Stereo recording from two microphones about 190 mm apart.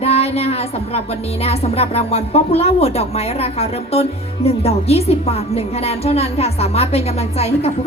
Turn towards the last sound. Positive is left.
turn(degrees=35)  # may be behind; listen again after turning